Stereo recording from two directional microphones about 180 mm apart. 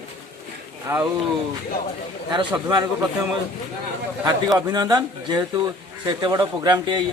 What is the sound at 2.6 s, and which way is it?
Speech, 20° right (ahead or behind).